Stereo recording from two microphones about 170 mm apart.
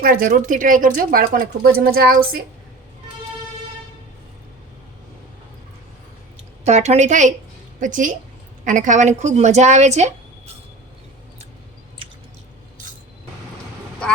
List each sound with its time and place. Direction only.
0.0 s a woman's voice: 55° right (ahead or behind)
6.7 s a woman's voice: 45° right (ahead or behind)
12.0 s squish: 30° right (ahead or behind)